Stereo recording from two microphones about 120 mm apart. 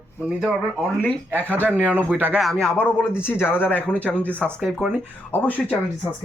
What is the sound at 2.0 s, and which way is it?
Speech, 15° right (ahead or behind).